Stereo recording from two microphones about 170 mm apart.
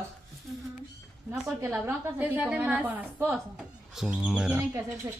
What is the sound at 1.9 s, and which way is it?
A woman's voice, 10° right (ahead or behind).